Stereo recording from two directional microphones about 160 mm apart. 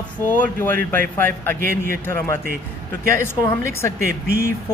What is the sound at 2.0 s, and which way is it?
Speech, 15° left (ahead or behind).